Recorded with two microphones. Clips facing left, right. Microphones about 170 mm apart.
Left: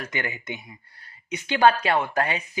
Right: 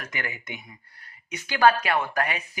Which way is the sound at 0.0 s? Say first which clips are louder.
Left 4 dB; 25° left (ahead or behind).